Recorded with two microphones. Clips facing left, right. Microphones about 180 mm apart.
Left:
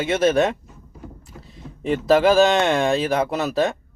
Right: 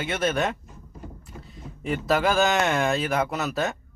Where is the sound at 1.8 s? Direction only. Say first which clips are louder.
Left 7 dB; 30° left (ahead or behind).